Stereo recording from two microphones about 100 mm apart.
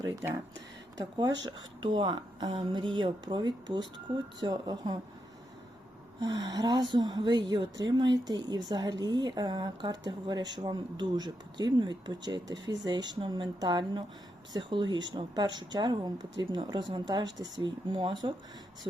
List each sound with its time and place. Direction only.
0.0 s speech: 30° right (ahead or behind)
6.1 s speech: 45° right (ahead or behind)